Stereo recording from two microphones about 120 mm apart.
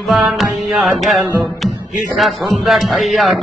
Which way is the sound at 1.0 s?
Centre (ahead or behind).